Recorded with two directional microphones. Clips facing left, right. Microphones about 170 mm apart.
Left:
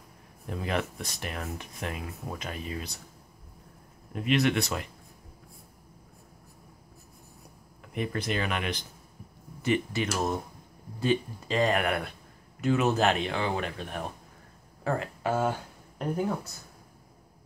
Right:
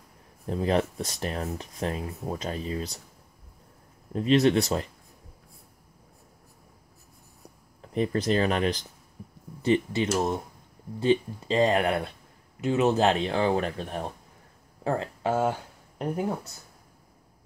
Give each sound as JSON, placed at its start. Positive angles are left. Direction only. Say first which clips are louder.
{"t": 0.5, "sound": "speech", "louder": "right 6 dB", "side_deg": -35}
{"t": 4.1, "sound": "speech", "louder": "right 5 dB", "side_deg": -35}
{"t": 7.8, "sound": "speech", "louder": "right 6 dB", "side_deg": -30}